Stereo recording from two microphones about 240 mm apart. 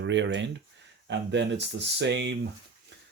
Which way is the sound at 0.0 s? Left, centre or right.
Right.